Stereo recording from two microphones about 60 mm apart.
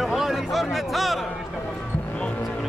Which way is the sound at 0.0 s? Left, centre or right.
Centre.